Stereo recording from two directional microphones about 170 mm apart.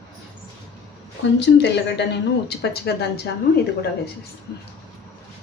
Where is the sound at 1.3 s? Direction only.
90° left.